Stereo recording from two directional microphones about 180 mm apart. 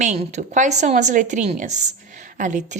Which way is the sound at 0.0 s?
40° right (ahead or behind).